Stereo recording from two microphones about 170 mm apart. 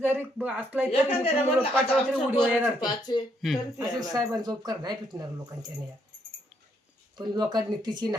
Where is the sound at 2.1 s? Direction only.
Centre (ahead or behind).